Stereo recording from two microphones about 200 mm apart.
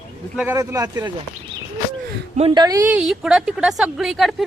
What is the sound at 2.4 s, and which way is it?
Speech, 20° right (ahead or behind).